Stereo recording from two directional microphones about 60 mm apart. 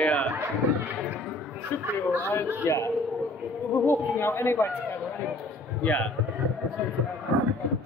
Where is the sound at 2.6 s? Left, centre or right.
Left.